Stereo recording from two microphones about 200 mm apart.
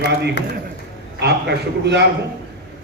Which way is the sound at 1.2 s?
55° right (ahead or behind).